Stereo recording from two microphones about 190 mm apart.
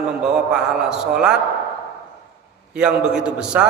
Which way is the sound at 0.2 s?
5° right (ahead or behind).